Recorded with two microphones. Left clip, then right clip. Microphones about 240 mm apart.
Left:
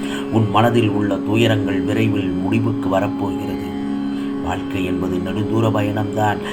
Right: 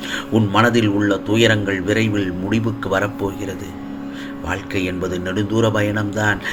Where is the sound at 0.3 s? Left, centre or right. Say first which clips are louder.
Even; right.